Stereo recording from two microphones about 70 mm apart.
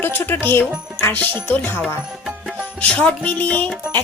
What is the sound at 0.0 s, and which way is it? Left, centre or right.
Speech, left.